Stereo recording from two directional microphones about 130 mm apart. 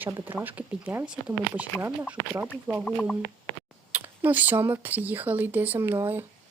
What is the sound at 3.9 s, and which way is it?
Speech, 15° right (ahead or behind).